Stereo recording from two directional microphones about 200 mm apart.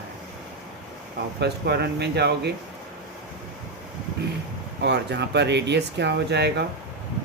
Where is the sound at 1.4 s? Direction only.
55° right (ahead or behind).